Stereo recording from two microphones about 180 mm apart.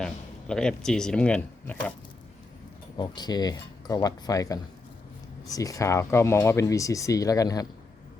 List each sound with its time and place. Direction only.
0.0 s speech: 5° left (ahead or behind)
3.0 s speech: 25° left (ahead or behind)